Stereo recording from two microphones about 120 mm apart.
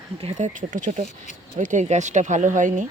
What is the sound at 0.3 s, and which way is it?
Speech, 90° right.